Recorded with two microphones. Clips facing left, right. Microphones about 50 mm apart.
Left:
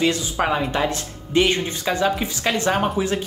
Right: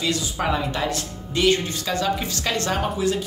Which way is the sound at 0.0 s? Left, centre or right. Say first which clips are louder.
Left 4 dB; left.